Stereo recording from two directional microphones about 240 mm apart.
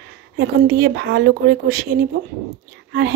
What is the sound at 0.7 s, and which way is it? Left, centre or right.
Speech, right.